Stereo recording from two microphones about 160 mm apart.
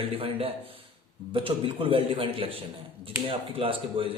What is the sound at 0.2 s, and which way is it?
A man's voice, 35° right (ahead or behind).